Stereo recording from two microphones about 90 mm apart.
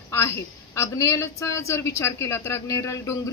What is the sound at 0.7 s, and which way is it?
A woman's voice, 35° left (ahead or behind).